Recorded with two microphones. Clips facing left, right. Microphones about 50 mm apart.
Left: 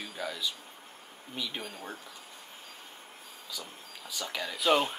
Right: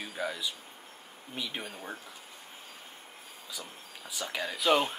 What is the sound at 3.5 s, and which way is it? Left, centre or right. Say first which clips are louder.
Speech: left 1 dB; centre.